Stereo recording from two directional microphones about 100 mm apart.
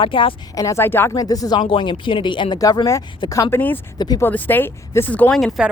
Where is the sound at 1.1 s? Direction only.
35° left (ahead or behind).